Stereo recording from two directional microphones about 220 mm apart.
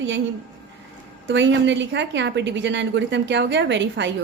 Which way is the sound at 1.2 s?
55° right (ahead or behind).